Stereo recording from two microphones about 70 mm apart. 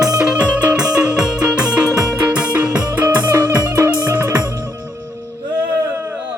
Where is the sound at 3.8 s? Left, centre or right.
Right.